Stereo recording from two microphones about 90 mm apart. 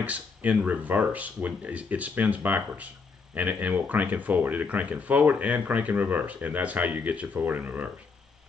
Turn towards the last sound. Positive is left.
turn(degrees=-20)  # may be behind; listen again after turning